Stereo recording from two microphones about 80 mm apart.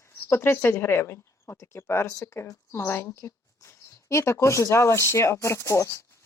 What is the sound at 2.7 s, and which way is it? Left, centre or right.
Speech, left.